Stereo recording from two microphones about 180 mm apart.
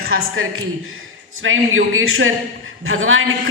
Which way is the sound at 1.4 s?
90° right.